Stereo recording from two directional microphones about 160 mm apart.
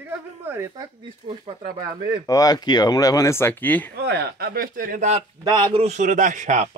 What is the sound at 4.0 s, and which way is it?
Speech, 90° right.